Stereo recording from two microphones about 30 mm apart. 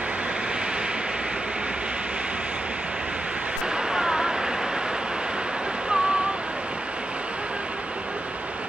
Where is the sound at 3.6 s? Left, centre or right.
Right.